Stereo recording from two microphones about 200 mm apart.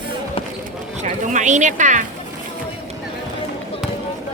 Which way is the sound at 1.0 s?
35° right (ahead or behind).